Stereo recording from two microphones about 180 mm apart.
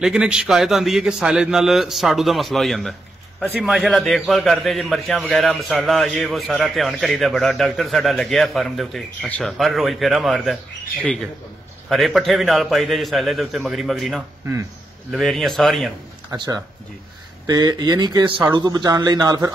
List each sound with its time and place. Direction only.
0.0 s a man's voice: 5° right (ahead or behind)
11.9 s a man's voice: centre (ahead or behind)
16.3 s a man's voice: 20° right (ahead or behind)